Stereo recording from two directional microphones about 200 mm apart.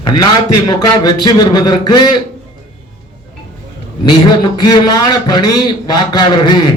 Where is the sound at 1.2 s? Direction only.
20° left (ahead or behind).